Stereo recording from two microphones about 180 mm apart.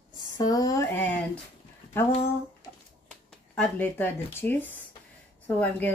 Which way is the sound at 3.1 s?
5° left (ahead or behind).